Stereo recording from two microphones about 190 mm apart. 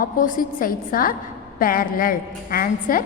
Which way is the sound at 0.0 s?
45° left (ahead or behind).